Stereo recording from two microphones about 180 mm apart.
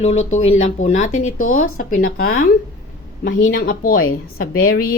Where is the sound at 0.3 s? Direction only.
40° left (ahead or behind).